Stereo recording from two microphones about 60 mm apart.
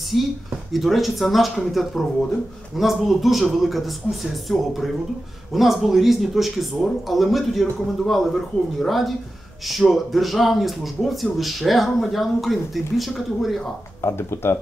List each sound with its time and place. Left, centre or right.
0.1 s speech: centre
14.0 s speech: left